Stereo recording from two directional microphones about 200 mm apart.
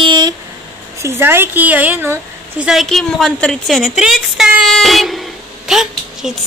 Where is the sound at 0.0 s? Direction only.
25° right (ahead or behind).